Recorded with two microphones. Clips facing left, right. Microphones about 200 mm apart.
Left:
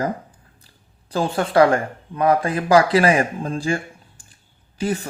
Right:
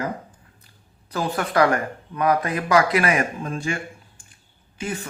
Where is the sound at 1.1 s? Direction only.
30° left (ahead or behind).